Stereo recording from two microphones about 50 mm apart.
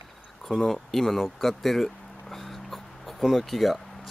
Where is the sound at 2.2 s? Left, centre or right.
Centre.